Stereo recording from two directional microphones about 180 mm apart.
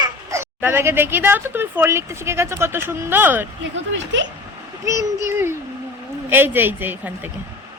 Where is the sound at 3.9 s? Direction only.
90° right.